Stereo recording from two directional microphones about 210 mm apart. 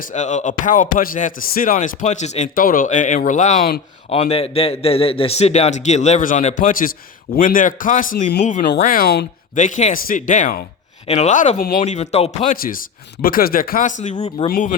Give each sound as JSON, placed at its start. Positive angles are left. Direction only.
{"t": 0.0, "sound": "speech", "side_deg": 35}
{"t": 12.5, "sound": "speech", "side_deg": 45}